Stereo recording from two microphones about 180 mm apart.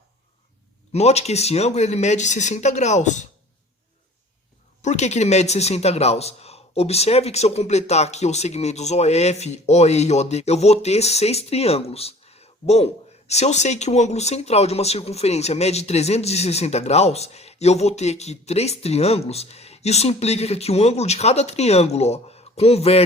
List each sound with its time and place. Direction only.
0.9 s speech: 35° left (ahead or behind)
4.8 s speech: 40° left (ahead or behind)